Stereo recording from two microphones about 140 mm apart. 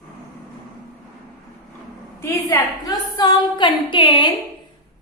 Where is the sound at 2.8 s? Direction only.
35° left (ahead or behind).